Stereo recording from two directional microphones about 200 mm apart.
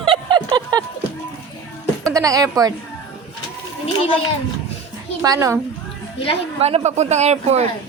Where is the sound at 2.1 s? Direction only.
15° right (ahead or behind).